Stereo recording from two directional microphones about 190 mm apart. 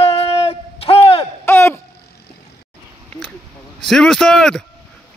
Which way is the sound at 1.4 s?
10° left (ahead or behind).